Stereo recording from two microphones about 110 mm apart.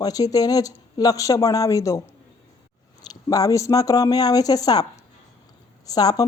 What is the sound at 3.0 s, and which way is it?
A woman's voice, 35° left (ahead or behind).